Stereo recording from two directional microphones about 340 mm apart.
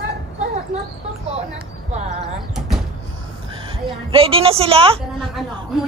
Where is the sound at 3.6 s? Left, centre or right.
Centre.